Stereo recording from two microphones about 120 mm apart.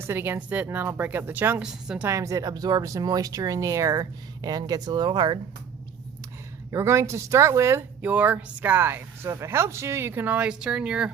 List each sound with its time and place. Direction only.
0.0 s speech: 20° right (ahead or behind)
1.6 s speech: 5° right (ahead or behind)
2.0 s speech: 25° right (ahead or behind)
6.7 s speech: 25° right (ahead or behind)
8.0 s speech: 10° right (ahead or behind)